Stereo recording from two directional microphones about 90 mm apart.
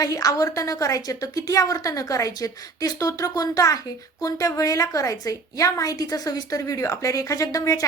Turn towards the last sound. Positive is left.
turn(degrees=35)  # may be behind; listen again after turning